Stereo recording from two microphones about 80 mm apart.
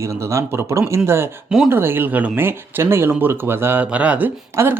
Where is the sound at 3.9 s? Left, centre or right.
Centre.